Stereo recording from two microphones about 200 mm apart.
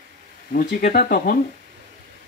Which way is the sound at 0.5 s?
45° left (ahead or behind).